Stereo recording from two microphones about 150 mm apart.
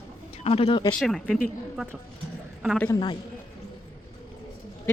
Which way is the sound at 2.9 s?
30° left (ahead or behind).